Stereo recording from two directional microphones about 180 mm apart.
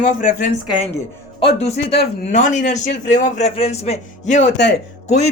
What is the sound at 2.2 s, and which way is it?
A man's voice, 45° left (ahead or behind).